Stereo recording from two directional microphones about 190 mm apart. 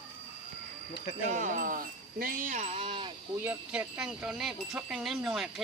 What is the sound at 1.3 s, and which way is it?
Speech, 45° right (ahead or behind).